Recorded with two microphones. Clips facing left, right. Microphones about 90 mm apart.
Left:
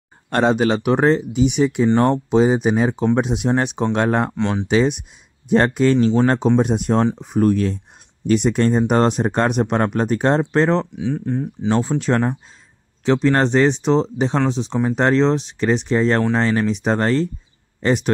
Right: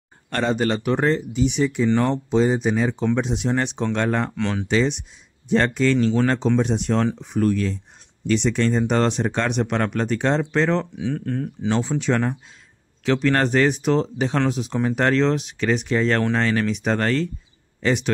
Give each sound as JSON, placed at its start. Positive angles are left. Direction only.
{"t": 0.3, "sound": "speech", "side_deg": 55}
{"t": 4.4, "sound": "speech", "side_deg": 25}
{"t": 4.6, "sound": "speech", "side_deg": 55}
{"t": 7.2, "sound": "speech", "side_deg": 40}
{"t": 11.0, "sound": "speech", "side_deg": 15}
{"t": 13.0, "sound": "speech", "side_deg": 25}
{"t": 17.8, "sound": "speech", "side_deg": 40}